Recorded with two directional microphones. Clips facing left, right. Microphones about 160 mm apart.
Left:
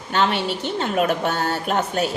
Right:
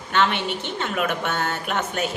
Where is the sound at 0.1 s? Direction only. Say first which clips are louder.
Left 1 dB; 35° left (ahead or behind).